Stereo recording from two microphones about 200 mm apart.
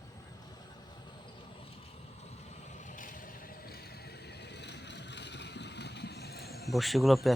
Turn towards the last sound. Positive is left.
turn(degrees=0)  # may be behind; listen again after turning